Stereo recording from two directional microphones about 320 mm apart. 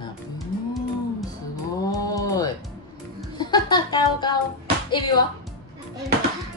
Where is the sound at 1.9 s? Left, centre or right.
Centre.